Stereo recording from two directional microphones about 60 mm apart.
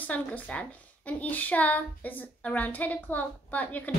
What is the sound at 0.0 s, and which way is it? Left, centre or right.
A woman's voice, left.